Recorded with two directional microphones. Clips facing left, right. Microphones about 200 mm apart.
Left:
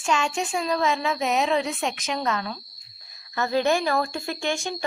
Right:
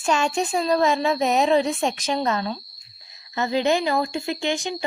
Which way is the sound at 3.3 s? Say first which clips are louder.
Right 1 dB; 20° right (ahead or behind).